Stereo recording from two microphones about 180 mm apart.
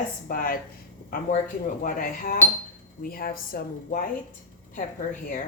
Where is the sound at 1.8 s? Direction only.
50° left (ahead or behind).